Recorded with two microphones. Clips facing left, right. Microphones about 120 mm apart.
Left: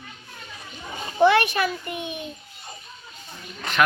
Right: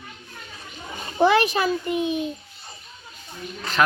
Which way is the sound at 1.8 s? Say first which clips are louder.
Right 8 dB; 30° right (ahead or behind).